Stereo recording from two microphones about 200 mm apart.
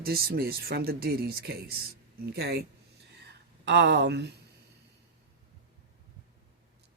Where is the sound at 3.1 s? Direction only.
55° right (ahead or behind).